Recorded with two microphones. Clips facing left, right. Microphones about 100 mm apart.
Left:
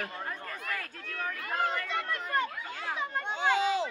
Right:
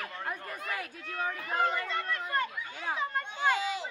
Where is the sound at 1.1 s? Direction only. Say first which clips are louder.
Right 2 dB; 25° right (ahead or behind).